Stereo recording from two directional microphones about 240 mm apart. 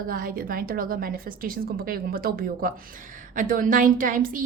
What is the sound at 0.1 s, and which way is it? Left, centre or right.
A woman's voice, right.